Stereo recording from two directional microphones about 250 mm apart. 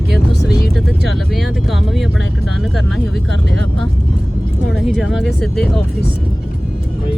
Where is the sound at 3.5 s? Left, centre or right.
Right.